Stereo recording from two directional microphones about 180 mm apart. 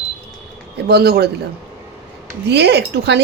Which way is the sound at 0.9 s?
65° right (ahead or behind).